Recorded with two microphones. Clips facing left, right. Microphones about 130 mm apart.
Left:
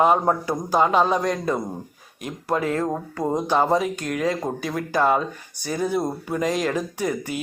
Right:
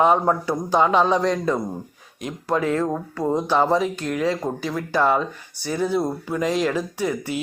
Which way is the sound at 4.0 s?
40° left (ahead or behind).